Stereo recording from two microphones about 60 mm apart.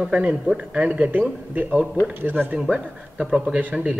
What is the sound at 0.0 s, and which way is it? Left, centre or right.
A man's voice, right.